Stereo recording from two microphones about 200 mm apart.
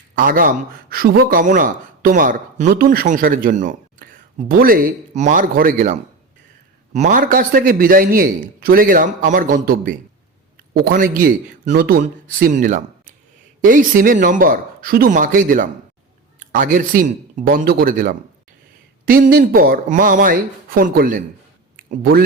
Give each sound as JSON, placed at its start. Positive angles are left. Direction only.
{"t": 0.2, "sound": "a man's voice", "side_deg": -45}